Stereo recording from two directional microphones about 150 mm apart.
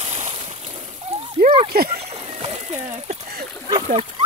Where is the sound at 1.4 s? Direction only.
70° right (ahead or behind).